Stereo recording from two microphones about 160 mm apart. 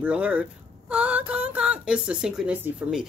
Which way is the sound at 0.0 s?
10° right (ahead or behind).